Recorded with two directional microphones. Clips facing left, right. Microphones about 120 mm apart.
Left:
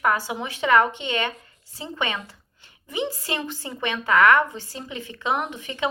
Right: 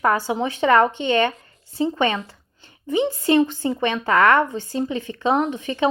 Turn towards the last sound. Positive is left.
turn(degrees=-30)  # may be behind; listen again after turning